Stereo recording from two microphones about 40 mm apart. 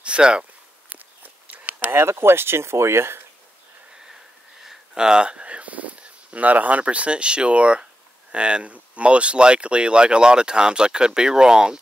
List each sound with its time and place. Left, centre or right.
0.0 s speech: right
0.8 s walk: right
1.9 s speech: right
4.1 s wheeze: centre
4.9 s speech: centre